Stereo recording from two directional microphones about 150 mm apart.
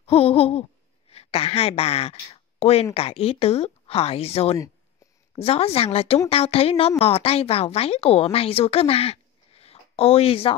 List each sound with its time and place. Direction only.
0.0 s a woman's voice: 40° left (ahead or behind)